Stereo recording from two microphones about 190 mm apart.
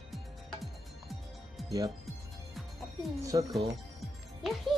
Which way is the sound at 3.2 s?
20° right (ahead or behind).